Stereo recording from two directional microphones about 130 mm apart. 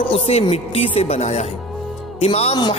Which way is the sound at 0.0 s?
50° left (ahead or behind).